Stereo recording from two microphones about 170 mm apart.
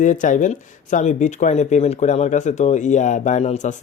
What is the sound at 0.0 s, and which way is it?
Speech, 50° left (ahead or behind).